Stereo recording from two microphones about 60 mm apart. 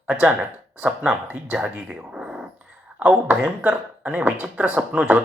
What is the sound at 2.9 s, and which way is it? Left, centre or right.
Speech, right.